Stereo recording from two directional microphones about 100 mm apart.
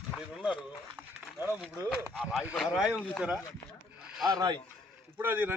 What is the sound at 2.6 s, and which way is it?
Speech, 5° right (ahead or behind).